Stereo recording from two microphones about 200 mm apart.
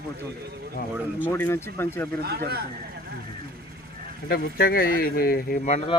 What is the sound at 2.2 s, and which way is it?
Speech, 50° right (ahead or behind).